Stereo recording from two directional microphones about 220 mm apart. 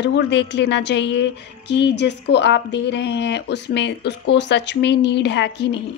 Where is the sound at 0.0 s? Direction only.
55° left (ahead or behind).